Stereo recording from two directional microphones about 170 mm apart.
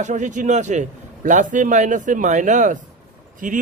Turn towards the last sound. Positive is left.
turn(degrees=-50)  # may be behind; listen again after turning